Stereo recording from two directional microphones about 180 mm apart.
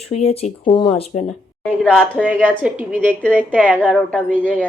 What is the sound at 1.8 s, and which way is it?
Speech, centre (ahead or behind).